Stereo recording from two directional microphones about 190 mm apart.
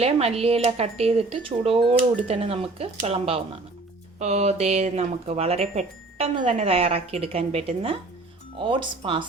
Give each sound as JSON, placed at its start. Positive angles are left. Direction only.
{"t": 0.0, "sound": "speech", "side_deg": -30}